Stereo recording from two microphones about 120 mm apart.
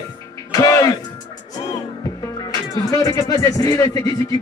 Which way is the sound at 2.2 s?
30° left (ahead or behind).